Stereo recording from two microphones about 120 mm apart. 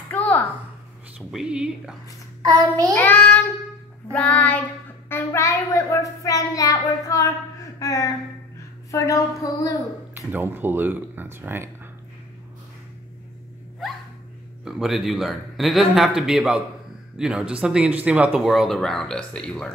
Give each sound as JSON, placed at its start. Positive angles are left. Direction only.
{"t": 0.1, "sound": "a sound", "side_deg": 15}
{"t": 1.3, "sound": "speech", "side_deg": -5}
{"t": 3.0, "sound": "child singing", "side_deg": 15}
{"t": 5.1, "sound": "a child's voice", "side_deg": 25}
{"t": 10.3, "sound": "speech", "side_deg": -15}
{"t": 14.6, "sound": "speech", "side_deg": -5}